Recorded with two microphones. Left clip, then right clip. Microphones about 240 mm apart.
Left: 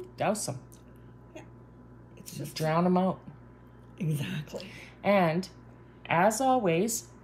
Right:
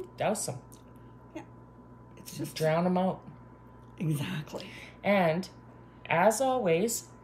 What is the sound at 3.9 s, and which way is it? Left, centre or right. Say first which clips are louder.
Speech: right 1 dB; centre.